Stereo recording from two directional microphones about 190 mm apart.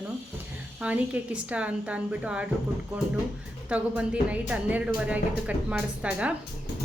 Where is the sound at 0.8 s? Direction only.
5° right (ahead or behind).